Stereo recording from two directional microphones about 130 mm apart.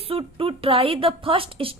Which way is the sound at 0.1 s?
45° right (ahead or behind).